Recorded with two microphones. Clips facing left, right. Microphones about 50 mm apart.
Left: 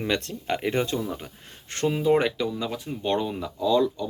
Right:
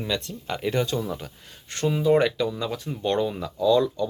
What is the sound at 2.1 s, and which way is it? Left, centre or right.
Speech, centre.